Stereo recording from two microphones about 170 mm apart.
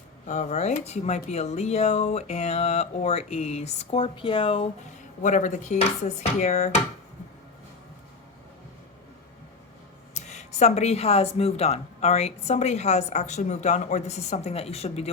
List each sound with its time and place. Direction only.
0.3 s speech: 45° left (ahead or behind)
5.2 s speech: 45° left (ahead or behind)
10.2 s speech: 45° left (ahead or behind)